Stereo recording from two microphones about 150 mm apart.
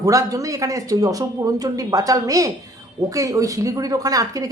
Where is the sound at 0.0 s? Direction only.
20° right (ahead or behind).